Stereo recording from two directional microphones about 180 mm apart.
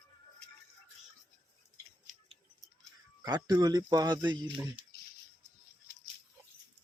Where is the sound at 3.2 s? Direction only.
20° right (ahead or behind).